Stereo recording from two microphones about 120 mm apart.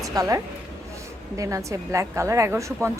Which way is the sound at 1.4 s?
25° right (ahead or behind).